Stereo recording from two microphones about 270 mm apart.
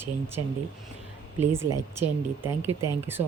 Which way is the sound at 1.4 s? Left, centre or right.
Centre.